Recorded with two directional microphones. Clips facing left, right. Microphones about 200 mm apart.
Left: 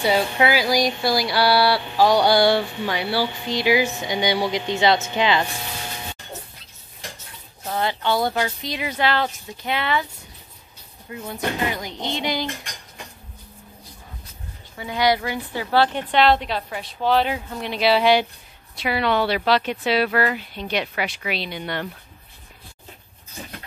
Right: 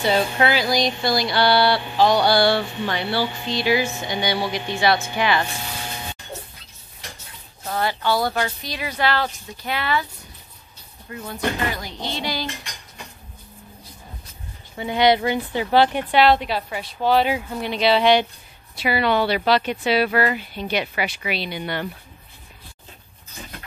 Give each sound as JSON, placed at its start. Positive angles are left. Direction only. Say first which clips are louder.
{"t": 0.0, "sound": "a sound", "louder": "even", "side_deg": 10}
{"t": 7.6, "sound": "speech", "louder": "even", "side_deg": 20}
{"t": 11.1, "sound": "speech", "louder": "right 1 dB", "side_deg": 15}
{"t": 14.8, "sound": "a woman's voice", "louder": "right 3 dB", "side_deg": -25}